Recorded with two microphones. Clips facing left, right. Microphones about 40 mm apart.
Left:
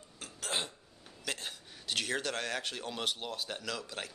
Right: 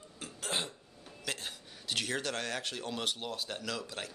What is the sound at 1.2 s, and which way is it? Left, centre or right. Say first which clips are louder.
Speech: even; centre.